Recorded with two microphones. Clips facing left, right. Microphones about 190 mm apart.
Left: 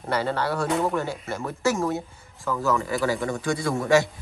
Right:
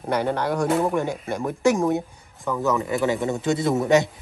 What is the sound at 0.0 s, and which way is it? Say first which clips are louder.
A man's voice: right 2 dB; 15° right (ahead or behind).